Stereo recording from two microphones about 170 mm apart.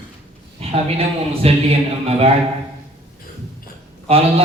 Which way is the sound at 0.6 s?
35° right (ahead or behind).